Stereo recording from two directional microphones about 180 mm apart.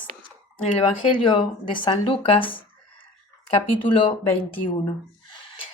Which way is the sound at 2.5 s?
30° left (ahead or behind).